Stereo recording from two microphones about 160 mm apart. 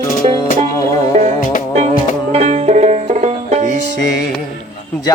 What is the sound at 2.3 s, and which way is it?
Music, 40° right (ahead or behind).